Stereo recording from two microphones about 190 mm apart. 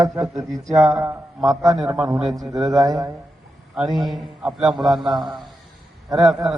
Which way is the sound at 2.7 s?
20° right (ahead or behind).